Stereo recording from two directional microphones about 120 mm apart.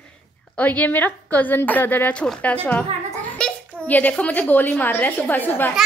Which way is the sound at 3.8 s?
15° left (ahead or behind).